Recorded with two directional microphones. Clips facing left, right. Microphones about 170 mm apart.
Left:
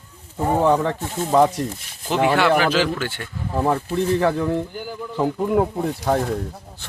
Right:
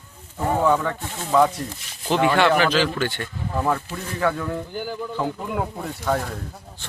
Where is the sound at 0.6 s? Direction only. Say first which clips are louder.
Left 2 dB; 30° left (ahead or behind).